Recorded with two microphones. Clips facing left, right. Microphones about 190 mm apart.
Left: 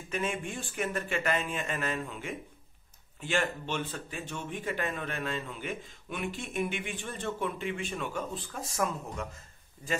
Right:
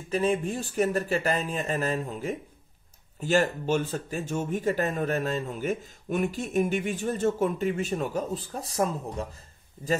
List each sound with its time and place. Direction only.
0.1 s speech: 35° right (ahead or behind)